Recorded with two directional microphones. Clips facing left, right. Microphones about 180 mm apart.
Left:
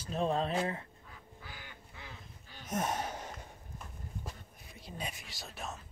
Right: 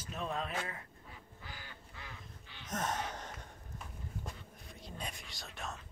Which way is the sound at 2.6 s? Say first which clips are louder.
Left 3 dB; 10° left (ahead or behind).